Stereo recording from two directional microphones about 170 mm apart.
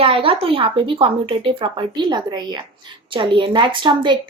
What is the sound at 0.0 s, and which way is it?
Speech, 30° right (ahead or behind).